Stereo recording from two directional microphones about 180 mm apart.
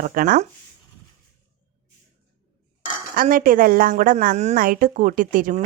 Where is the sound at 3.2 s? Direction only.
50° right (ahead or behind).